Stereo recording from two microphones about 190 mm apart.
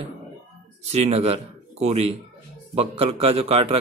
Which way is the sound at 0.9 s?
35° right (ahead or behind).